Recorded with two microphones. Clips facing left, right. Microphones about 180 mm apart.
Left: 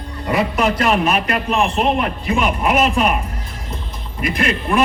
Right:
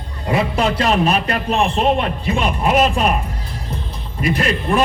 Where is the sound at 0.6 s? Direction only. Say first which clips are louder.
Even; 30° right (ahead or behind).